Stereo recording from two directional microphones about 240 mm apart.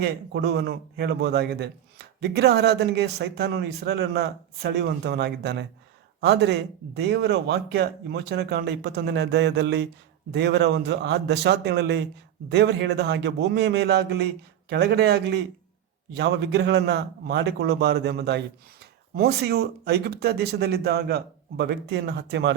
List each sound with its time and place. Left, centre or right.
0.0 s a man's voice: right